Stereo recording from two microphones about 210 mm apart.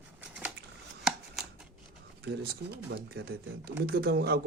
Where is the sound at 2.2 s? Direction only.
50° right (ahead or behind).